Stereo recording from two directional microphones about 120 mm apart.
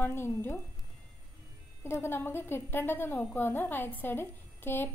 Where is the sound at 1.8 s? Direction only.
20° left (ahead or behind).